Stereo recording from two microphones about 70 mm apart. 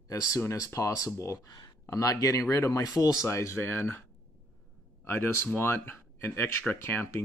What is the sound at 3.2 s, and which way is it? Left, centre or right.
Speech, left.